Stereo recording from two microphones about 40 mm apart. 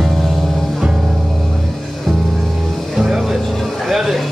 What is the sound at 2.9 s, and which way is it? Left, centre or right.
Music, centre.